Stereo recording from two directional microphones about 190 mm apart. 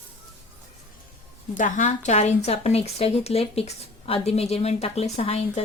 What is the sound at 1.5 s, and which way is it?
A woman's voice, 40° left (ahead or behind).